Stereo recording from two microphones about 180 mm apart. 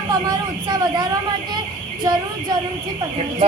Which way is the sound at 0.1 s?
25° right (ahead or behind).